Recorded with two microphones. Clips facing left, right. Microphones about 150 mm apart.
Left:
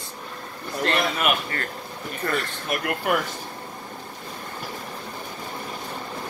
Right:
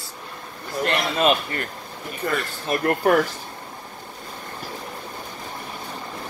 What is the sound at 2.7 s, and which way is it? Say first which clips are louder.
Speech: right 6 dB; 40° right (ahead or behind).